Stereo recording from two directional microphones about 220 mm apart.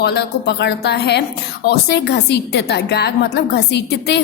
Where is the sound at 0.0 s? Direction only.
50° left (ahead or behind).